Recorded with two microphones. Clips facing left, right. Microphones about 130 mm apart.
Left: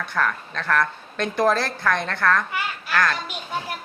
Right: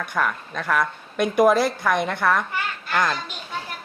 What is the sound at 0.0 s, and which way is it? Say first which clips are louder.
A woman's voice: even; 15° right (ahead or behind).